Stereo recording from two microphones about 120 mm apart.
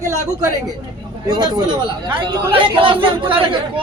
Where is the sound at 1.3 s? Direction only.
35° right (ahead or behind).